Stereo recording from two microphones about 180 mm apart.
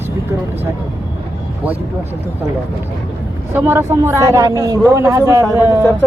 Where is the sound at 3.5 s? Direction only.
15° right (ahead or behind).